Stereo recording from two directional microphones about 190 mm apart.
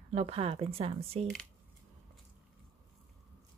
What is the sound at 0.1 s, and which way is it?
Speech, 35° right (ahead or behind).